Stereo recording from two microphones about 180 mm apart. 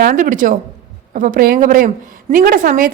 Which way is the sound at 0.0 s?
50° right (ahead or behind).